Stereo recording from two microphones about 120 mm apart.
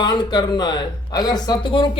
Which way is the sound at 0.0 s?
35° left (ahead or behind).